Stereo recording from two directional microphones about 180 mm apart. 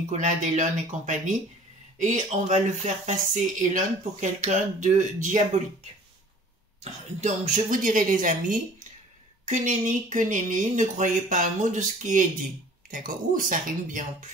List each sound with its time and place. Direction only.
0.1 s speech: 40° right (ahead or behind)
6.8 s speech: 40° right (ahead or behind)